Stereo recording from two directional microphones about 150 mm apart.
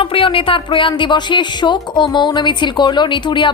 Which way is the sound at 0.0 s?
40° left (ahead or behind).